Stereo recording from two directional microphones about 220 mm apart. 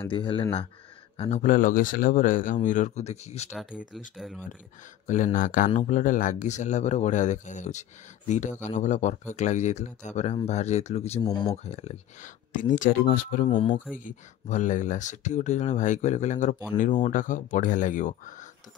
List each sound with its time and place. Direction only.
0.1 s speech: 20° left (ahead or behind)
4.2 s speech: centre (ahead or behind)
5.0 s speech: 35° left (ahead or behind)
11.1 s speech: 15° left (ahead or behind)
11.5 s speech: 30° left (ahead or behind)
13.5 s speech: 25° left (ahead or behind)
13.9 s speech: 35° left (ahead or behind)